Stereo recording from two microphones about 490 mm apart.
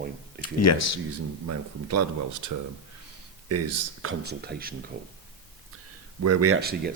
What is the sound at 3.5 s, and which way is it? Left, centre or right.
Speech, right.